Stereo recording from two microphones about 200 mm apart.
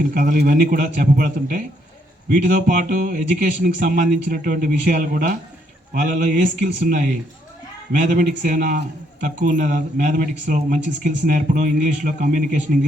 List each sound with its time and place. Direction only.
0.1 s speech: 45° right (ahead or behind)